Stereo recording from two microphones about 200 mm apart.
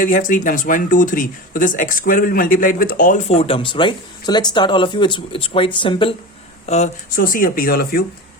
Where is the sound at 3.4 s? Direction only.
25° left (ahead or behind).